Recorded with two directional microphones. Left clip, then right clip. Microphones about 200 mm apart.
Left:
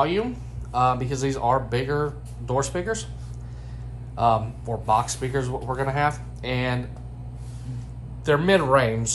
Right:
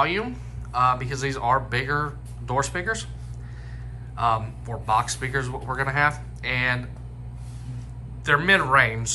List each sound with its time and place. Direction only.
0.0 s speech: 20° left (ahead or behind)
4.1 s speech: 25° left (ahead or behind)
8.3 s speech: 25° left (ahead or behind)